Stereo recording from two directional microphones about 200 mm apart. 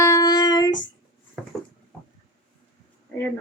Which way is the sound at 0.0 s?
15° left (ahead or behind).